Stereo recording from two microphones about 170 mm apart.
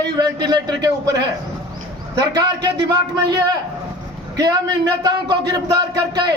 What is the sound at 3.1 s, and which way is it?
A man's voice, 20° right (ahead or behind).